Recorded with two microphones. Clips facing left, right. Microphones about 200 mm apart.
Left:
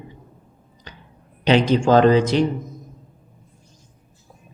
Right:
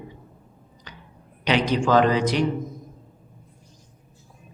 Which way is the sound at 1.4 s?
30° left (ahead or behind).